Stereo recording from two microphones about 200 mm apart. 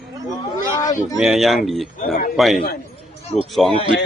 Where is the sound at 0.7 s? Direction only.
15° left (ahead or behind).